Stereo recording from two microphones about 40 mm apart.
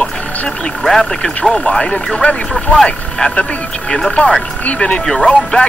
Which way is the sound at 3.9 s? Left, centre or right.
Left.